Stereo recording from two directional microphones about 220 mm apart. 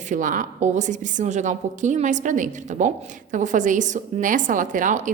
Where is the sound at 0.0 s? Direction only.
35° right (ahead or behind).